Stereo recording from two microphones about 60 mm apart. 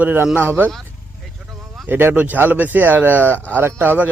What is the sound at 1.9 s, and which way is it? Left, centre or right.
Speech, right.